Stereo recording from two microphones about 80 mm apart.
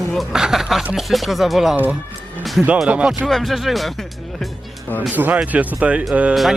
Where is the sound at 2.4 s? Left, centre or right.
Centre.